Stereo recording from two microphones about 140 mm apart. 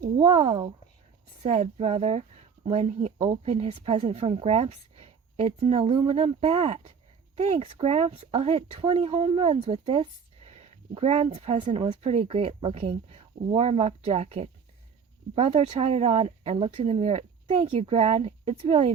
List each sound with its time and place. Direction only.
0.3 s speech: 40° right (ahead or behind)
1.4 s speech: 50° right (ahead or behind)